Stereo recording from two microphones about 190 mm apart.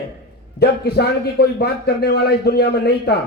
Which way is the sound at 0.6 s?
60° left (ahead or behind).